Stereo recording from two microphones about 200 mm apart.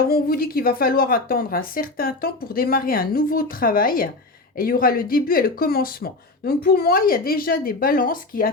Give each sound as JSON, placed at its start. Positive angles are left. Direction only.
{"t": 0.0, "sound": "speech", "side_deg": 50}